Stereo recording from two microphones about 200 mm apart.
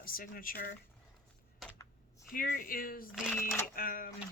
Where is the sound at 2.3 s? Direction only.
45° left (ahead or behind).